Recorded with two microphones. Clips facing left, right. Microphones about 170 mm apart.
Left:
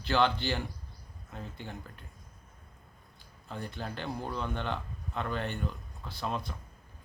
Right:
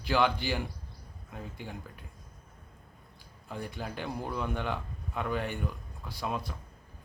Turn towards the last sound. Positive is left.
turn(degrees=-5)  # may be behind; listen again after turning